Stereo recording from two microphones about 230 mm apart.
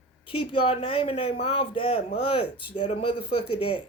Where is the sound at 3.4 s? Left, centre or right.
Left.